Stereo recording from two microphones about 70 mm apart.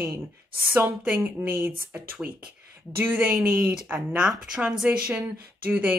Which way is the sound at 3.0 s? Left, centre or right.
Right.